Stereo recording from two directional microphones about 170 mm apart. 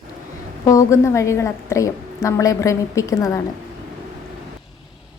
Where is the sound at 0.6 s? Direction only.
20° left (ahead or behind).